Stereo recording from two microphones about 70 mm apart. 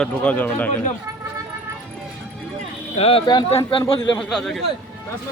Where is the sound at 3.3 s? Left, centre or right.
Left.